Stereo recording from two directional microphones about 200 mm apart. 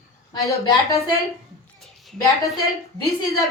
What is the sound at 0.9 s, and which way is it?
Speech, 30° left (ahead or behind).